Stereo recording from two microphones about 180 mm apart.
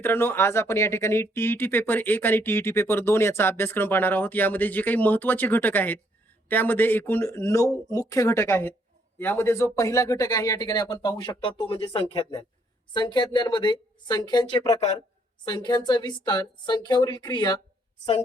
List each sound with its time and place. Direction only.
0.0 s speech: 10° left (ahead or behind)